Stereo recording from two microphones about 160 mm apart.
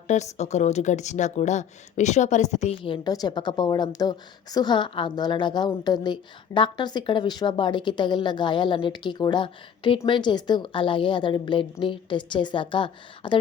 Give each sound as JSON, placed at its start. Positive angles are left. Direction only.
{"t": 0.1, "sound": "a woman's voice", "side_deg": 45}